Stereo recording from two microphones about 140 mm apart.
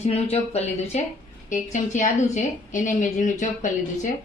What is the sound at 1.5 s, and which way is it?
A woman's voice, 65° left (ahead or behind).